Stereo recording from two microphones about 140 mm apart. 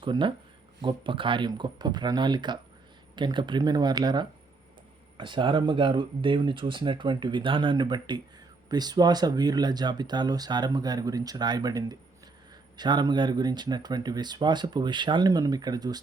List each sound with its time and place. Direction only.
0.0 s speech: 35° right (ahead or behind)